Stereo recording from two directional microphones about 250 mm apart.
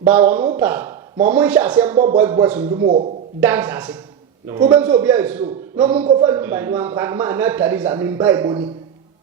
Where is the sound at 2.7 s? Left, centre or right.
Right.